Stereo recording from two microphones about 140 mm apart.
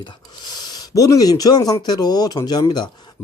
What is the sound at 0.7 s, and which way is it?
Speech, 25° left (ahead or behind).